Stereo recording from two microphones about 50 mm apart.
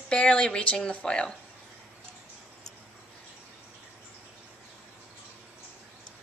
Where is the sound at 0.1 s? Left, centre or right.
Left.